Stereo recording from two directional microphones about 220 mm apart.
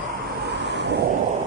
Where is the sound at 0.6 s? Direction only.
50° right (ahead or behind).